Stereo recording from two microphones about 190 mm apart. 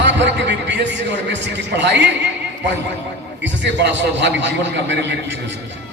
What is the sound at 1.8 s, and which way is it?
Speech, 65° right (ahead or behind).